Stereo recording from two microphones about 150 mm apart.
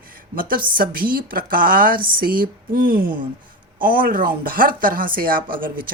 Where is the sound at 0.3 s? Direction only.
70° right (ahead or behind).